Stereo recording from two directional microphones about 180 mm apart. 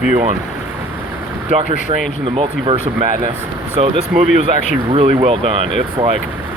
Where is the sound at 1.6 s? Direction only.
45° left (ahead or behind).